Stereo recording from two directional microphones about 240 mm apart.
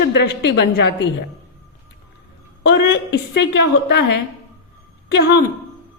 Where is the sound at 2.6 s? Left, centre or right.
Left.